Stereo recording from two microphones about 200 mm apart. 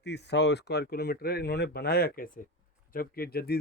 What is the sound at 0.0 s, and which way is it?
Speech, 60° left (ahead or behind).